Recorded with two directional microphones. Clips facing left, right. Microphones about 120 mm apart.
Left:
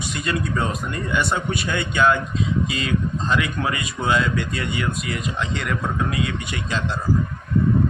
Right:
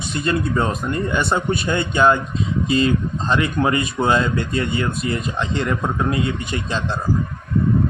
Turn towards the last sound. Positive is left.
turn(degrees=-30)  # may be behind; listen again after turning